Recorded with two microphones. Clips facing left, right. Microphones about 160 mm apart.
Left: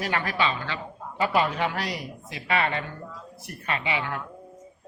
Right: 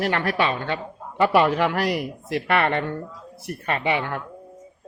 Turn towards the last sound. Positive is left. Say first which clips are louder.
# right 5 dB
turn(degrees=-55)  # may be behind; listen again after turning